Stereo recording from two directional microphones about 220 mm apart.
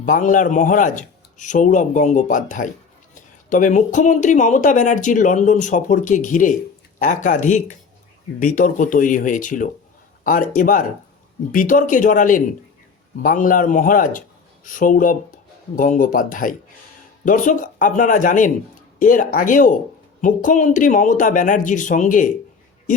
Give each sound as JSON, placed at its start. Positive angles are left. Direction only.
{"t": 0.0, "sound": "speech", "side_deg": 35}